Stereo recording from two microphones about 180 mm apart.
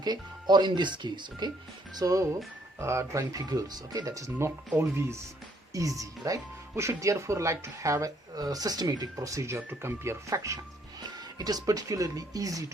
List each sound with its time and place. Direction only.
0.0 s speech: 25° right (ahead or behind)